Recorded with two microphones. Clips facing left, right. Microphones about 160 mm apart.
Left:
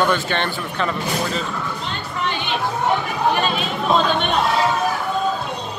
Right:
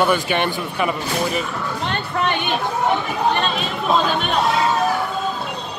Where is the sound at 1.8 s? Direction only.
60° right (ahead or behind).